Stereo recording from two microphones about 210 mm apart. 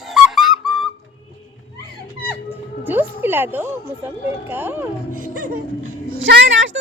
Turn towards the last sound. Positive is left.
turn(degrees=-65)  # may be behind; listen again after turning